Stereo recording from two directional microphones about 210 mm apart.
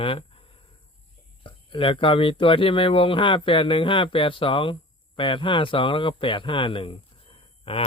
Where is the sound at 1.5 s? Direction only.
25° left (ahead or behind).